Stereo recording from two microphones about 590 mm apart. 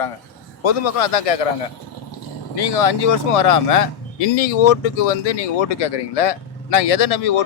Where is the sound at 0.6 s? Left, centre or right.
Left.